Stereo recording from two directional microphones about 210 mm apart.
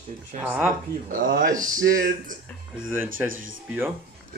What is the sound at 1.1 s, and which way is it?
Speech, 40° right (ahead or behind).